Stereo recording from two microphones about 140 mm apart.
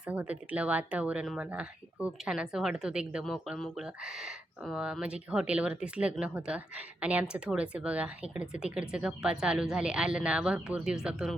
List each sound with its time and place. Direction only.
0.0 s a woman's voice: 10° right (ahead or behind)